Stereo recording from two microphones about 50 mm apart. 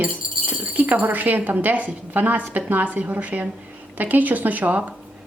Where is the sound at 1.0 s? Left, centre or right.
Right.